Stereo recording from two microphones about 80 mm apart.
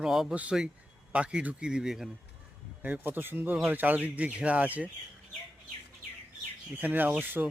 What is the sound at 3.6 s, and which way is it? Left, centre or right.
Fowl, right.